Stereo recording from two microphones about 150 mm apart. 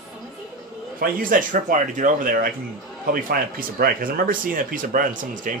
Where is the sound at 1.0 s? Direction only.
65° right (ahead or behind).